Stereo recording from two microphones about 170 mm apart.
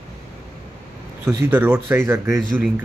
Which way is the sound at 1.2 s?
15° right (ahead or behind).